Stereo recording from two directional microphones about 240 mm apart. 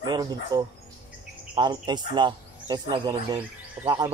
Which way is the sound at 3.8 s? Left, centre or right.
Centre.